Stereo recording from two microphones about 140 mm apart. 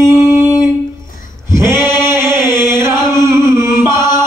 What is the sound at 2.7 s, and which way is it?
Chant, 20° right (ahead or behind).